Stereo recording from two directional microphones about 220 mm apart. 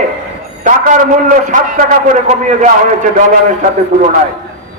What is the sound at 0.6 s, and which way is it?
A man's voice, 35° right (ahead or behind).